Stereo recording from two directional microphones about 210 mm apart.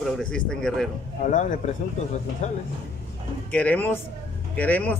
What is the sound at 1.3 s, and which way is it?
Speech, 35° left (ahead or behind).